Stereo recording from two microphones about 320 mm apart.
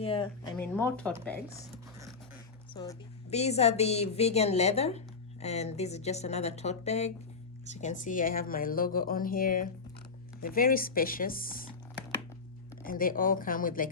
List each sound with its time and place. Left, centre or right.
0.0 s speech: centre
0.5 s speech: centre
2.7 s a woman's voice: centre
12.8 s a woman's voice: left